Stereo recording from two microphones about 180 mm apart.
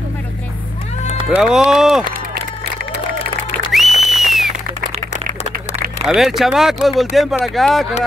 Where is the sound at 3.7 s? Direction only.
Centre (ahead or behind).